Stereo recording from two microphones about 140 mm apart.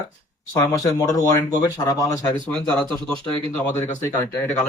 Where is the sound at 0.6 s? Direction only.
20° left (ahead or behind).